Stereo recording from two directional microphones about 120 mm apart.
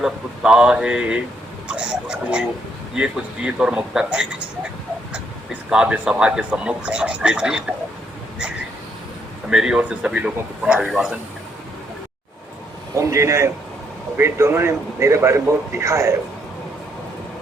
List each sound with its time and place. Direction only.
0.0 s speech: 5° right (ahead or behind)
5.7 s speech: 5° right (ahead or behind)
9.5 s speech: 5° right (ahead or behind)
13.0 s a man's voice: 25° right (ahead or behind)